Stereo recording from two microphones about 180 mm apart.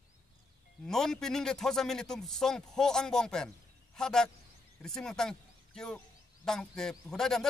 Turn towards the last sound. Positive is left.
turn(degrees=5)  # may be behind; listen again after turning